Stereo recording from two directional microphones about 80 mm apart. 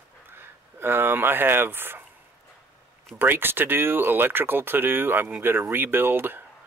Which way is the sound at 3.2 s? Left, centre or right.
Right.